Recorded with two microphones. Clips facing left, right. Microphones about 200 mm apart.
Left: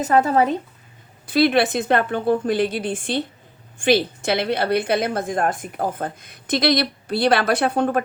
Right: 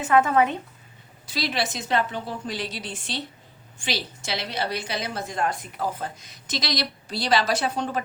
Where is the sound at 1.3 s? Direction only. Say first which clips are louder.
Left 11 dB; 55° left (ahead or behind).